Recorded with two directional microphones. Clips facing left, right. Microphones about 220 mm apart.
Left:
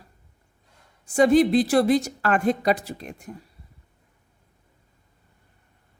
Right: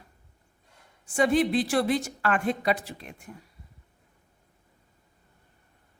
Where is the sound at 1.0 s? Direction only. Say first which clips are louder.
Left 6 dB; 40° left (ahead or behind).